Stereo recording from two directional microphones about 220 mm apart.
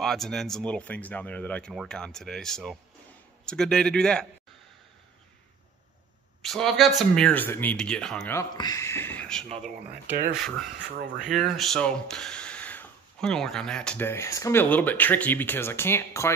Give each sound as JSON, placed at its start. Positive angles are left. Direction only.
{"t": 0.0, "sound": "speech", "side_deg": 0}
{"t": 6.4, "sound": "speech", "side_deg": 0}
{"t": 8.4, "sound": "speech", "side_deg": 15}
{"t": 11.1, "sound": "speech", "side_deg": 0}